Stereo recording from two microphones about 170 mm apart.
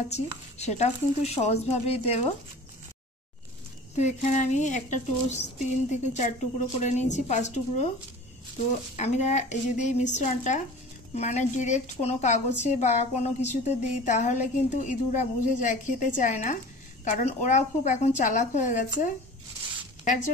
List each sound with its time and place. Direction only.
0.1 s speech: 40° left (ahead or behind)
3.9 s a woman's voice: 45° left (ahead or behind)
8.9 s a woman's voice: 45° left (ahead or behind)